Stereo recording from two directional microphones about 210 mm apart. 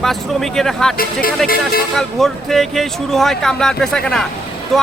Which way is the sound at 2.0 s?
Centre (ahead or behind).